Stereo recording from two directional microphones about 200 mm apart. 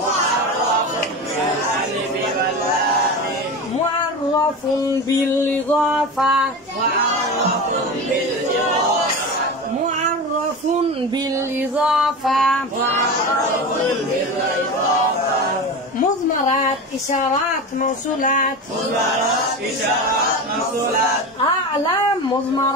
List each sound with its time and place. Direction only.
5.9 s music: centre (ahead or behind)
11.8 s female singing: 5° right (ahead or behind)
17.8 s speech: 40° left (ahead or behind)